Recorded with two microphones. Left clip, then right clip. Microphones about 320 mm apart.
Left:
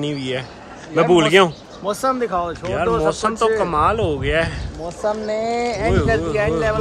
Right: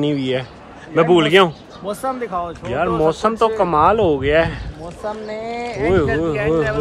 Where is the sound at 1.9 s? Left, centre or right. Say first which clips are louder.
Left 3 dB; left.